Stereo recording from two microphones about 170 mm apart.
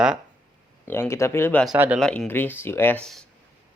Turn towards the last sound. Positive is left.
turn(degrees=5)  # may be behind; listen again after turning